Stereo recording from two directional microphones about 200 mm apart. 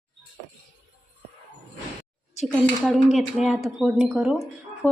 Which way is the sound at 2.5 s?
Centre (ahead or behind).